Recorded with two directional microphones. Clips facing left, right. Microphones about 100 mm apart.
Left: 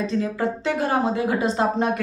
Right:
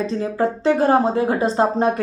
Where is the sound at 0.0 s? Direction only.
35° right (ahead or behind).